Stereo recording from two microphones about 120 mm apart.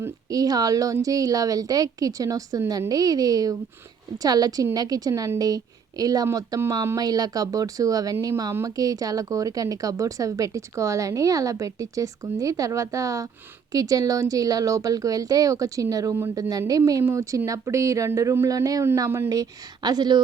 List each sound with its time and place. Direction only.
0.0 s a woman's voice: 30° right (ahead or behind)